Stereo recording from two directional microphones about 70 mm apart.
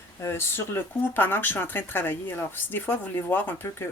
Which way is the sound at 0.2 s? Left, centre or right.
Left.